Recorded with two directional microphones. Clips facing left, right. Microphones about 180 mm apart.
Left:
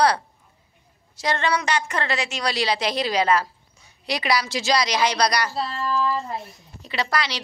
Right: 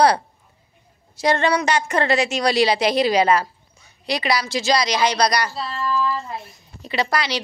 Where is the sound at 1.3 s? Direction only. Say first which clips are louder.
Right 4 dB; 45° right (ahead or behind).